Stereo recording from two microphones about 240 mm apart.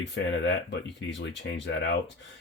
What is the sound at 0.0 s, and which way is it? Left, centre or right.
Speech, left.